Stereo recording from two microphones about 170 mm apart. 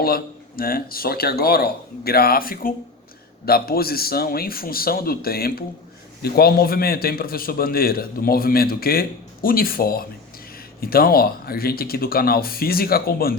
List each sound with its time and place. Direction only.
0.0 s a man's voice: 60° left (ahead or behind)